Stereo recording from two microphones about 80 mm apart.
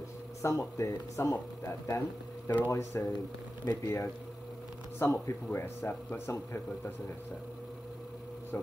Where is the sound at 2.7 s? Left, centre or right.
Left.